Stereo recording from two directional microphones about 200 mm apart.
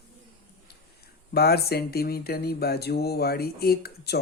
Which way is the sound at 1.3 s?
50° left (ahead or behind).